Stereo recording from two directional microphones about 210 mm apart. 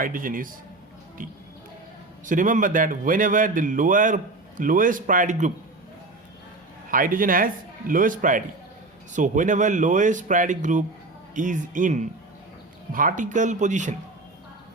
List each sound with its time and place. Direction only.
0.0 s a man's voice: 40° right (ahead or behind)
6.9 s a man's voice: 40° right (ahead or behind)